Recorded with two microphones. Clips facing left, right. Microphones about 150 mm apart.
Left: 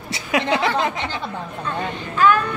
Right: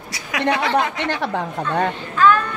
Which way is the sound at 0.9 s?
80° right.